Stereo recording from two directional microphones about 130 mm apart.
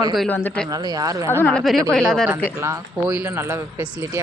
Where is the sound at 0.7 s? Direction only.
30° right (ahead or behind).